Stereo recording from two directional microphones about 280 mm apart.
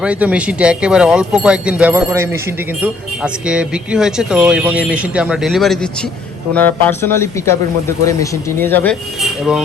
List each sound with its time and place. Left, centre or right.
0.0 s speech: centre